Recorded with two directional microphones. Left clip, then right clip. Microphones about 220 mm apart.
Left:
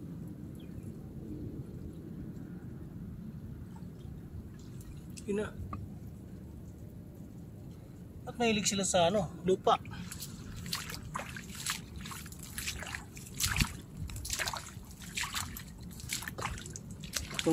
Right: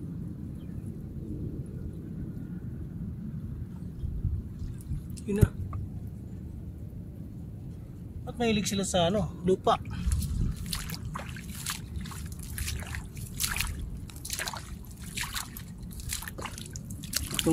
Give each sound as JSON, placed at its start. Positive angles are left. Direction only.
{"t": 5.2, "sound": "speech", "side_deg": -10}
{"t": 8.3, "sound": "speech", "side_deg": -5}
{"t": 10.7, "sound": "trickle", "side_deg": -5}
{"t": 14.2, "sound": "a sound", "side_deg": -10}
{"t": 17.1, "sound": "drip", "side_deg": -35}